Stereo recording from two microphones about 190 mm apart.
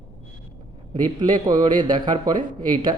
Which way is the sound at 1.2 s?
20° right (ahead or behind).